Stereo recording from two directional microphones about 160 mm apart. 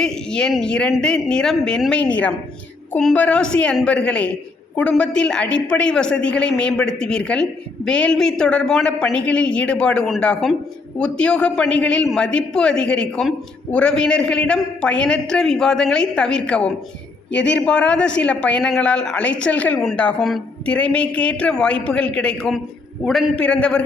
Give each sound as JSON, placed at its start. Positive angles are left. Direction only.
{"t": 0.0, "sound": "a man's voice", "side_deg": 5}
{"t": 17.3, "sound": "speech", "side_deg": 90}
{"t": 17.7, "sound": "a woman's voice", "side_deg": 5}